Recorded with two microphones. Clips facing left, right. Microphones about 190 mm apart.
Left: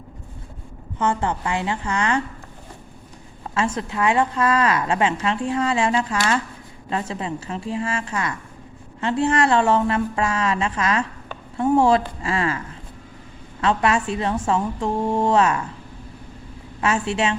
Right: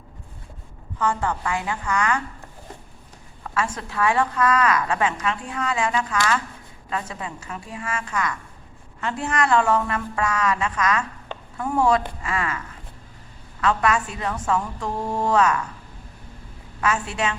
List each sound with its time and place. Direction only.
0.9 s a woman's voice: 25° left (ahead or behind)
3.4 s a woman's voice: 25° left (ahead or behind)
16.8 s a woman's voice: 25° left (ahead or behind)